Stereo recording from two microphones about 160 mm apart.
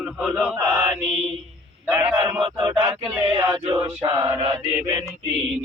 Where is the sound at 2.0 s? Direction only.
15° right (ahead or behind).